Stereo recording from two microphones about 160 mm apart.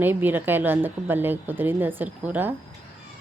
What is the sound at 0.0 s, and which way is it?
A woman's voice, 10° right (ahead or behind).